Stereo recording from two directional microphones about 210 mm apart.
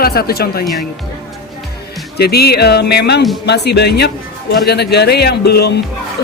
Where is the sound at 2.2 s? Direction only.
50° left (ahead or behind).